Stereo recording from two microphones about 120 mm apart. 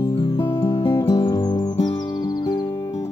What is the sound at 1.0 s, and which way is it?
Music, 25° left (ahead or behind).